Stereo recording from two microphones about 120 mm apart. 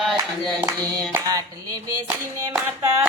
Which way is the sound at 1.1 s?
30° right (ahead or behind).